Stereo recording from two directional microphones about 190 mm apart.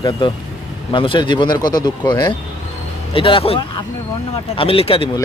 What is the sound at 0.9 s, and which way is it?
Speech, 25° left (ahead or behind).